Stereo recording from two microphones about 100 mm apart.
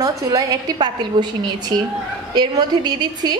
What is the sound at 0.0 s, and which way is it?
A woman's voice, 35° right (ahead or behind).